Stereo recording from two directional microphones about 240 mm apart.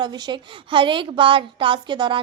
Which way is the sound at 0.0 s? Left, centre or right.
Centre.